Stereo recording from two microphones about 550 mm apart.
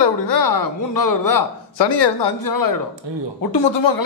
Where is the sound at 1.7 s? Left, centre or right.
Left.